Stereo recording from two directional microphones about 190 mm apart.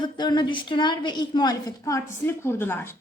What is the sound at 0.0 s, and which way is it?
A woman's voice, 25° left (ahead or behind).